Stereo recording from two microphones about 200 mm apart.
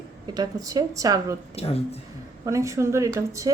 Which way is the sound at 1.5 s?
30° left (ahead or behind).